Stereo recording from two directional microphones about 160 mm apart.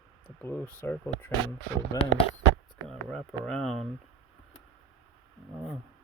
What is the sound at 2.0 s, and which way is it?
Speech, 20° left (ahead or behind).